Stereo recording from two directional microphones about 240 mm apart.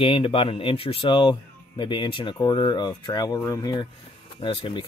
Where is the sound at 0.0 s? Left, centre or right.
Left.